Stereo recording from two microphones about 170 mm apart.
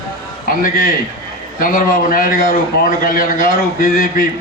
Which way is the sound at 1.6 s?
55° left (ahead or behind).